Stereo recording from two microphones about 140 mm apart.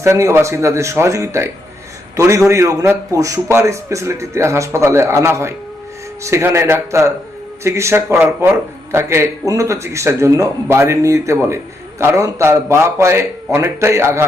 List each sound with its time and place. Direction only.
0.0 s a man's voice: 20° right (ahead or behind)